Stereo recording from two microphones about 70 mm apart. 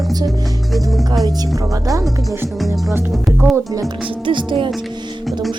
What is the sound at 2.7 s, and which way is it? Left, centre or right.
Speech, right.